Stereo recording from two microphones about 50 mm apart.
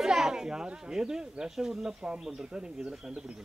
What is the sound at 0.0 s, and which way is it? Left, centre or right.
Speech, centre.